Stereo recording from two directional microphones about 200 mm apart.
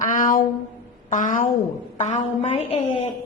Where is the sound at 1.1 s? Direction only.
40° left (ahead or behind).